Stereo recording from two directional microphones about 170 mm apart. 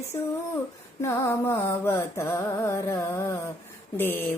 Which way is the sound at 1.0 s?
15° left (ahead or behind).